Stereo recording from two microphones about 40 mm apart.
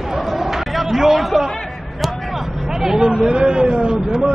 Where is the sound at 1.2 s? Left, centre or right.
Centre.